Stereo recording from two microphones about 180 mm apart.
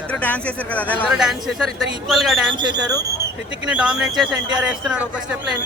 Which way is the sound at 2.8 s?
20° right (ahead or behind).